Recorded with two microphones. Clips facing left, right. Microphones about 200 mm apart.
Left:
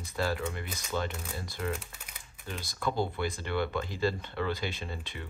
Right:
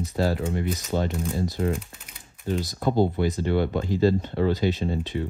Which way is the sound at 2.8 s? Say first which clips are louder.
Right 8 dB; 45° right (ahead or behind).